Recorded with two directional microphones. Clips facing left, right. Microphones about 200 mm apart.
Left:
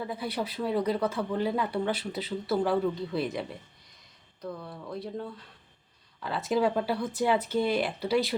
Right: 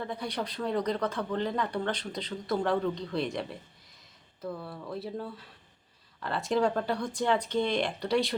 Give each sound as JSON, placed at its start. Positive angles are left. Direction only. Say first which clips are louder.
{"t": 0.0, "sound": "speech", "louder": "left 2 dB", "side_deg": 5}